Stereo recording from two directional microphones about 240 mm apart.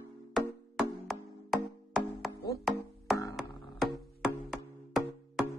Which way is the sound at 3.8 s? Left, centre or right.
Centre.